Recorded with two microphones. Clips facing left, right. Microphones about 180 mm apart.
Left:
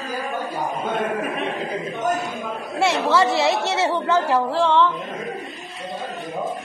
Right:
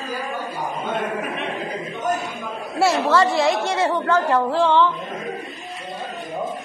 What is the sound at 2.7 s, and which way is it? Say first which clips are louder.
Speech: right 1 dB; centre (ahead or behind).